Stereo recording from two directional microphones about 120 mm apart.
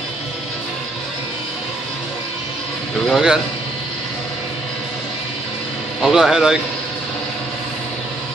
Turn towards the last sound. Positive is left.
turn(degrees=-5)  # may be behind; listen again after turning